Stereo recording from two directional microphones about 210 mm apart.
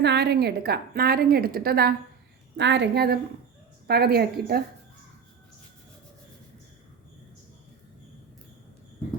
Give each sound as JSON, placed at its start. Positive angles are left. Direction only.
{"t": 0.0, "sound": "a woman's voice", "side_deg": -50}